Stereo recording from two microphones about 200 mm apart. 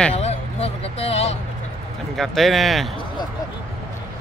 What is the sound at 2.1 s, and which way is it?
Speech, centre (ahead or behind).